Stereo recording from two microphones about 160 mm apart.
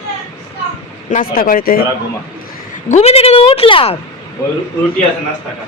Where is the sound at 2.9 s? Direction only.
45° left (ahead or behind).